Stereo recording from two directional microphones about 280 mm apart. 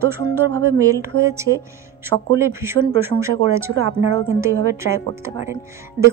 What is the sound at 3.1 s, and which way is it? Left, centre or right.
Speech, right.